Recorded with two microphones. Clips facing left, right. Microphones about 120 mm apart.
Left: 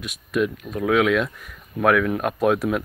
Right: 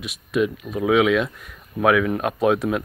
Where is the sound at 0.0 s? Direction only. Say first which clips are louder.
Right 1 dB; centre (ahead or behind).